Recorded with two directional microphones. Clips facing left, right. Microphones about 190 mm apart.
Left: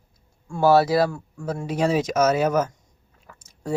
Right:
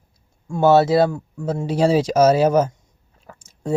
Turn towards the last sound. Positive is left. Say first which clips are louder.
# right 4 dB
turn(degrees=-25)  # may be behind; listen again after turning